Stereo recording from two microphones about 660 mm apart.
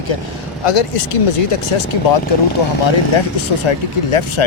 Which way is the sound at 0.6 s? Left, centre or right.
Left.